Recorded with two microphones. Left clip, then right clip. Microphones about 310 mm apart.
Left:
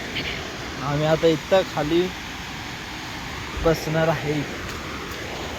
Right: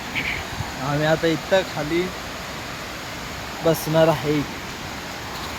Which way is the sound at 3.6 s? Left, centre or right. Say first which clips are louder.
Right 3 dB; centre.